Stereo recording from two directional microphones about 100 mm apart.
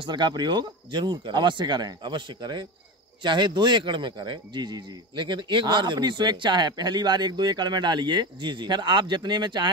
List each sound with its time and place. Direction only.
0.0 s speech: 50° right (ahead or behind)